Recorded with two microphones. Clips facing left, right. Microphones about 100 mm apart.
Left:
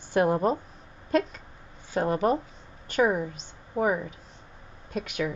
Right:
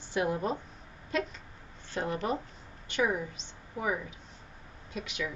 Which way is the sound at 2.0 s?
50° left (ahead or behind).